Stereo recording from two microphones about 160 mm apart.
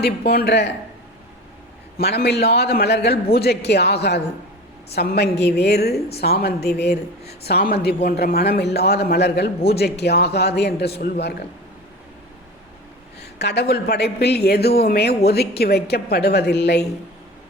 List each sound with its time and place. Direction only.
0.3 s a woman's voice: 80° left
2.0 s a woman's voice: 90° left
3.7 s a woman's voice: 90° left
13.1 s a woman's voice: 90° left